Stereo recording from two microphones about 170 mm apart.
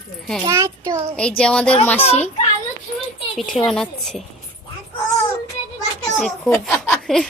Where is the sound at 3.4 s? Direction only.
Centre (ahead or behind).